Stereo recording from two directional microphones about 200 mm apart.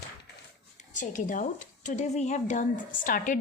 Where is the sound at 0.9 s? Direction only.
40° left (ahead or behind).